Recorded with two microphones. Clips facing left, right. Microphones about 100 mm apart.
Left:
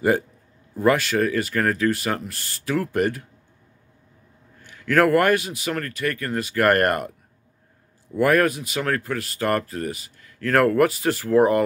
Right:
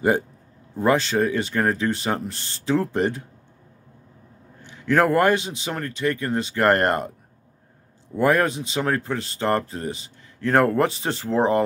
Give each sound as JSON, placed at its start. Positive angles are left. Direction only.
{"t": 0.7, "sound": "speech", "side_deg": -25}
{"t": 4.6, "sound": "speech", "side_deg": -20}
{"t": 8.2, "sound": "speech", "side_deg": -20}